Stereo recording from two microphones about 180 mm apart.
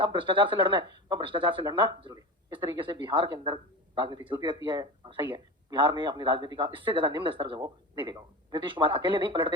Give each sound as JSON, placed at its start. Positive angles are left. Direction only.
{"t": 0.0, "sound": "speech", "side_deg": -25}